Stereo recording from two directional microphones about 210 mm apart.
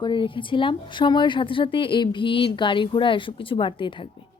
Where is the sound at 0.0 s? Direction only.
25° left (ahead or behind).